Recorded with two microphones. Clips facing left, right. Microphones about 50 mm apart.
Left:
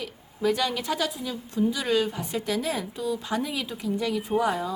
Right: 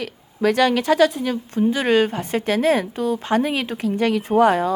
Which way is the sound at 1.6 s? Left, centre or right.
Right.